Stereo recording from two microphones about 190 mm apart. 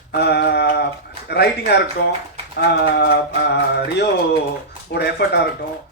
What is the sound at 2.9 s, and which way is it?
A man's voice, 60° left (ahead or behind).